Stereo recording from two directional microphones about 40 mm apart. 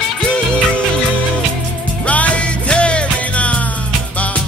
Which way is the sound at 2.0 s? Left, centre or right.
Left.